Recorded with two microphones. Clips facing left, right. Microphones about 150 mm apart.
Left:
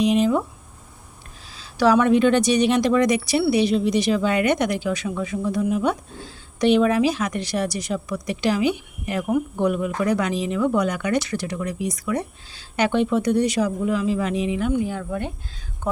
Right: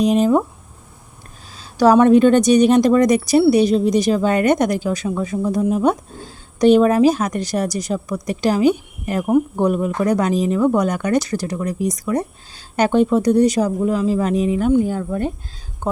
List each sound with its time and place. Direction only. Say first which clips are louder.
0.0 s a woman's voice: right 4 dB; 40° right (ahead or behind)
1.5 s a woman's voice: right 5 dB; 40° right (ahead or behind)